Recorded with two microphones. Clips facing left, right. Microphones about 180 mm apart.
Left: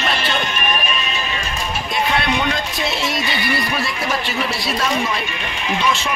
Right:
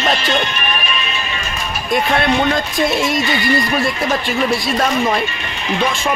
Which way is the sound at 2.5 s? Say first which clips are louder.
Right 6 dB; 50° right (ahead or behind).